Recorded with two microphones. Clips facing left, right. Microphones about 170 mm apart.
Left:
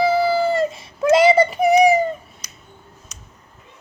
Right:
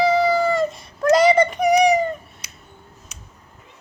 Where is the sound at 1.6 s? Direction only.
30° left (ahead or behind).